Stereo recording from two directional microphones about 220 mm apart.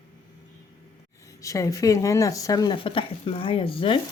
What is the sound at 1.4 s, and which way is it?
Speech, 15° left (ahead or behind).